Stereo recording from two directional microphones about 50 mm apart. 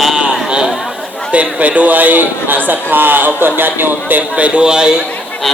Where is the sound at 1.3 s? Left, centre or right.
Right.